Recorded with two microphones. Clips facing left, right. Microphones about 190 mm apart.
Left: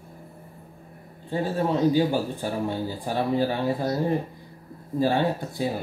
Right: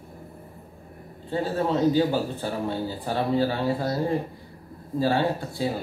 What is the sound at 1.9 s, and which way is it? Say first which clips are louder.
Speech: even; 15° left (ahead or behind).